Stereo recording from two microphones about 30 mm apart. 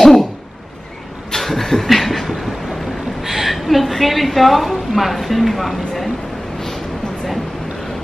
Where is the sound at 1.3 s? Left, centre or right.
Centre.